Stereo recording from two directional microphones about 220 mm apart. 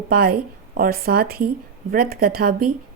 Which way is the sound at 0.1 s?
45° right (ahead or behind).